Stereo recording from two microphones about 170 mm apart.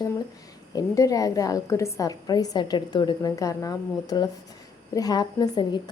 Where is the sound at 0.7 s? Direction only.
20° left (ahead or behind).